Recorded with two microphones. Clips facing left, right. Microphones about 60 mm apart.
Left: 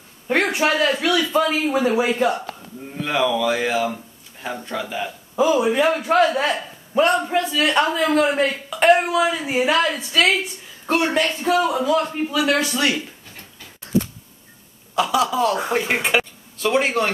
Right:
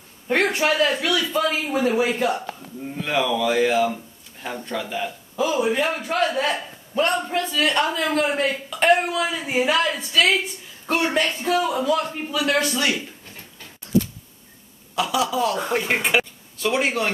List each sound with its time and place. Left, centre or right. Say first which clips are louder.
0.3 s a man's voice: left 1 dB; centre
5.3 s a man's voice: left 4 dB; centre
7.0 s speech: left 4 dB; centre
10.9 s a man's voice: left 2 dB; centre
11.4 s a man's voice: left 3 dB; centre
15.0 s speech: left 3 dB; centre